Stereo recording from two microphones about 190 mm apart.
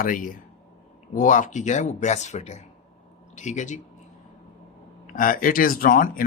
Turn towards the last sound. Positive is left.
turn(degrees=45)  # may be behind; listen again after turning